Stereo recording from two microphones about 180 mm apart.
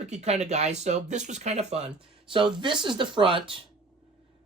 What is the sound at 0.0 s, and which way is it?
Speech, 35° right (ahead or behind).